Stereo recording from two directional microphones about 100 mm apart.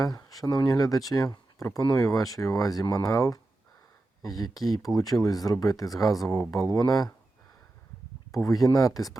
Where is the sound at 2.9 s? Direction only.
35° left (ahead or behind).